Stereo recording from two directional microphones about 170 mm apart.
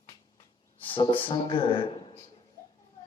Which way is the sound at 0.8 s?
30° left (ahead or behind).